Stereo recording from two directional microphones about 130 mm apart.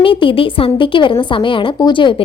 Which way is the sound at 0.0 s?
40° left (ahead or behind).